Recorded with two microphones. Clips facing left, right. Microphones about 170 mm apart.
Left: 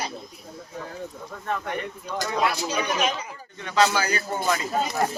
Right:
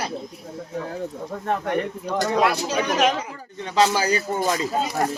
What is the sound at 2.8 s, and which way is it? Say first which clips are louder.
Speech: right 6 dB; 85° right.